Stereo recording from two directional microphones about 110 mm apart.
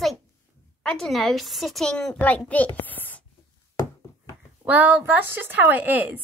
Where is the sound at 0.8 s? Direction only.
5° left (ahead or behind).